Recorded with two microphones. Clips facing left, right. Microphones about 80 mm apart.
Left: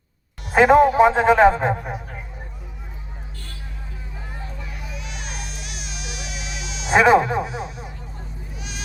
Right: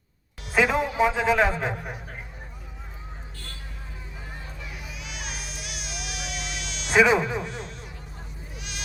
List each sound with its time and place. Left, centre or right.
0.5 s a man's voice: left
4.7 s baby cry: centre
6.9 s a man's voice: left
7.4 s a sound: centre
8.5 s sheep: centre